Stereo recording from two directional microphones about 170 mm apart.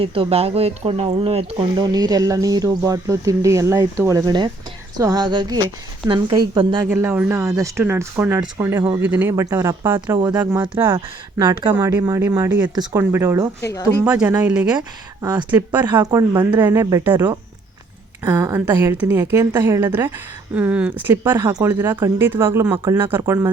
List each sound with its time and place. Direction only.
0.0 s speech: 30° right (ahead or behind)
1.8 s speech: 25° right (ahead or behind)
6.8 s speech: 10° right (ahead or behind)
10.8 s speech: 25° right (ahead or behind)
13.7 s speech: 15° left (ahead or behind)
14.0 s speech: 5° right (ahead or behind)
14.8 s speech: 25° right (ahead or behind)
16.6 s speech: 15° right (ahead or behind)